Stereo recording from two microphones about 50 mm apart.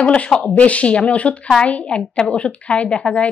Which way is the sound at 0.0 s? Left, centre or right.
Left.